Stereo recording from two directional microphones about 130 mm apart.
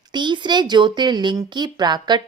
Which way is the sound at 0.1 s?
35° right (ahead or behind).